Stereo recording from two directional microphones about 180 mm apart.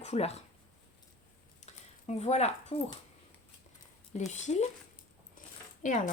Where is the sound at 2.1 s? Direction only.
35° left (ahead or behind).